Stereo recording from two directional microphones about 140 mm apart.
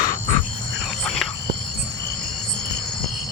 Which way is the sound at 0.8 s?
5° left (ahead or behind).